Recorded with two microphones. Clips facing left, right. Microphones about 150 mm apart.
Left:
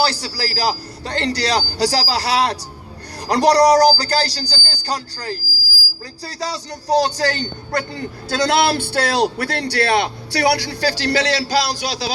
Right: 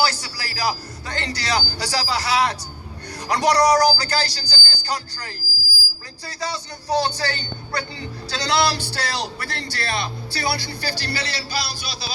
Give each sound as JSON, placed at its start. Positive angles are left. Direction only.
{"t": 0.0, "sound": "a man's voice", "side_deg": 35}